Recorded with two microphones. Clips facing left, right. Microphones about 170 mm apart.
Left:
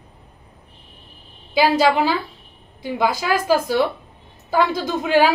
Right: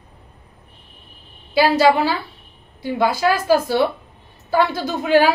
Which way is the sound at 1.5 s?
15° left (ahead or behind).